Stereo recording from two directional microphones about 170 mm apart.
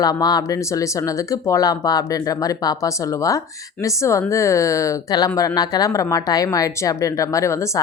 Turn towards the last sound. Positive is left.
turn(degrees=15)  # may be behind; listen again after turning